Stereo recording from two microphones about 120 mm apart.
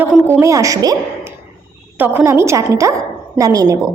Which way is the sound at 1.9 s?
15° right (ahead or behind).